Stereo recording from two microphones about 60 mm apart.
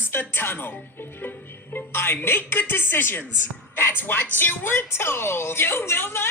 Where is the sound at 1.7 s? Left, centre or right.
Left.